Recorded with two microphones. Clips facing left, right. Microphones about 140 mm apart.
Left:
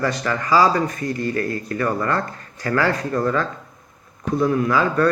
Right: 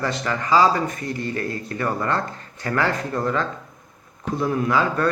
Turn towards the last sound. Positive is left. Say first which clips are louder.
# left 2 dB
turn(degrees=-25)  # may be behind; listen again after turning